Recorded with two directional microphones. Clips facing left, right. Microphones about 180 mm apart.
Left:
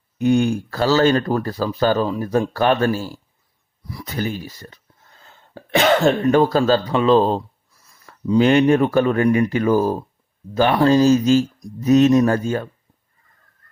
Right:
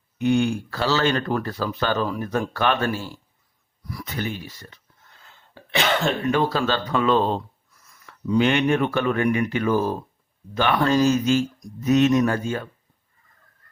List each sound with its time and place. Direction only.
0.2 s speech: 40° left (ahead or behind)
5.5 s cough: 45° left (ahead or behind)
6.3 s speech: 45° left (ahead or behind)